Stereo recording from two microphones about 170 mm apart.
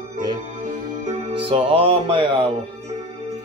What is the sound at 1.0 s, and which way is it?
Music, 35° right (ahead or behind).